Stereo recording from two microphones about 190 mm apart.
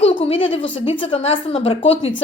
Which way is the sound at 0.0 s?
25° left (ahead or behind).